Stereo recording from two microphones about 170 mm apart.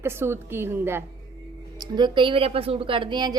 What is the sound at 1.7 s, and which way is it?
A woman's voice, 25° right (ahead or behind).